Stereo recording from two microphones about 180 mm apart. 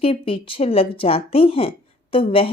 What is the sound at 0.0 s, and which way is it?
Speech, 30° left (ahead or behind).